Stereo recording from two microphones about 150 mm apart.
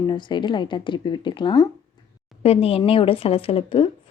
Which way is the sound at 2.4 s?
40° left (ahead or behind).